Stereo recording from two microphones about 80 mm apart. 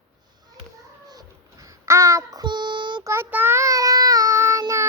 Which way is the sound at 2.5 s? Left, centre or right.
Right.